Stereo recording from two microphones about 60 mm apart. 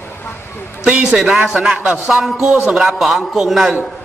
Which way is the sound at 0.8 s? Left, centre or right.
Centre.